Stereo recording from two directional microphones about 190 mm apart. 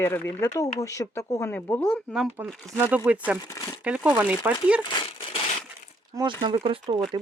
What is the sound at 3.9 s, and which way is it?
Speech, 5° right (ahead or behind).